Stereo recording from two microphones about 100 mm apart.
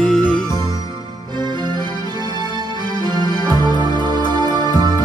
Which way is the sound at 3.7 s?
45° left (ahead or behind).